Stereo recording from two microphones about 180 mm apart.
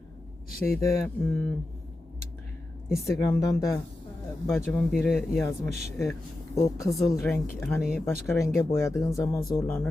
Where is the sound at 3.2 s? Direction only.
20° left (ahead or behind).